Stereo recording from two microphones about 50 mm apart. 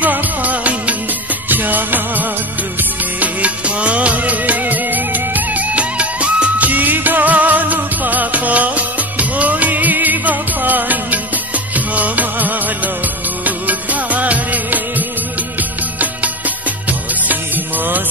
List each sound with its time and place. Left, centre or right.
0.0 s music: right